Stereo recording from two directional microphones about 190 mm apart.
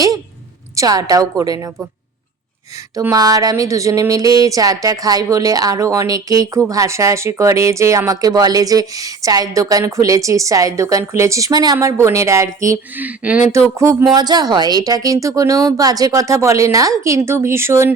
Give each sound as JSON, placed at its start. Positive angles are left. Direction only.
{"t": 0.8, "sound": "a woman's voice", "side_deg": -20}
{"t": 2.7, "sound": "speech", "side_deg": -15}